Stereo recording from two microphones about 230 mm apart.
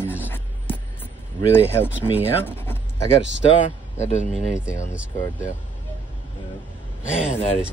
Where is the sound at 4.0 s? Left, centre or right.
Left.